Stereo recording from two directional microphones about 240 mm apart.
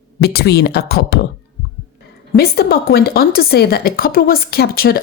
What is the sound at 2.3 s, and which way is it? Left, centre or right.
A woman's voice, left.